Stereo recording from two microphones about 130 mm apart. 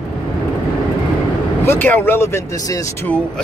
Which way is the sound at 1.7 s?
15° left (ahead or behind).